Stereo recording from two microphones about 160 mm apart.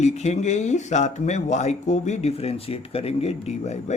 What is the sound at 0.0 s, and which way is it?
Speech, 45° left (ahead or behind).